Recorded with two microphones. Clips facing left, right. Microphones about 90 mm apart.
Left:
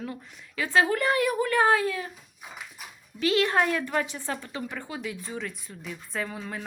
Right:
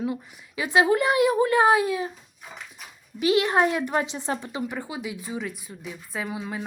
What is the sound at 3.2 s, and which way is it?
A woman's voice, 15° right (ahead or behind).